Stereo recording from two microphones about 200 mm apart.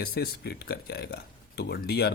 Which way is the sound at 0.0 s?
50° left (ahead or behind).